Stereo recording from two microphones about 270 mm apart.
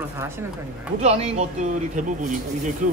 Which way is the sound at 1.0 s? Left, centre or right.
Right.